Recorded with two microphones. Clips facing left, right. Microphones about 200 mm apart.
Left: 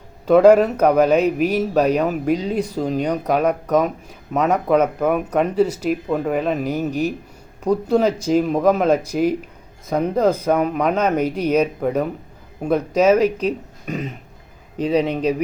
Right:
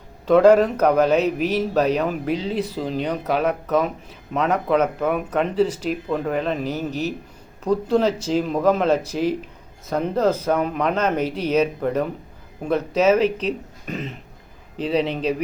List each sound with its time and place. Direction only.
0.3 s speech: 10° left (ahead or behind)
14.8 s a man's voice: 40° left (ahead or behind)